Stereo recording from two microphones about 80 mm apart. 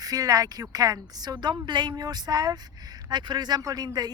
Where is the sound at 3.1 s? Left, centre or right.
Right.